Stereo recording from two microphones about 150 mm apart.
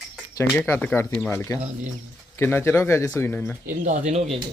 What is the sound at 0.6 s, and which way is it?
Speech, 10° left (ahead or behind).